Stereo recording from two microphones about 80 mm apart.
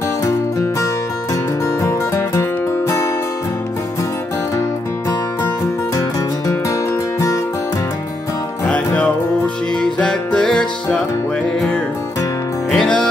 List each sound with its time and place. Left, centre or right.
1.8 s music: left
8.6 s music: centre
12.7 s music: centre